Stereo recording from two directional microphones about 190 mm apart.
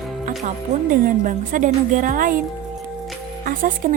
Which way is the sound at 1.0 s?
45° right (ahead or behind).